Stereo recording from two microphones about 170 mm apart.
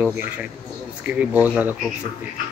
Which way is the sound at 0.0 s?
10° right (ahead or behind).